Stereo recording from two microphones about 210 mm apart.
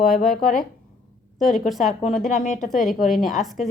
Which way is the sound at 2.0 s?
35° left (ahead or behind).